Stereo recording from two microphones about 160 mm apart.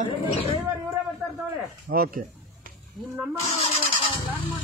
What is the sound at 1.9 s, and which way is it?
Speech, 65° right (ahead or behind).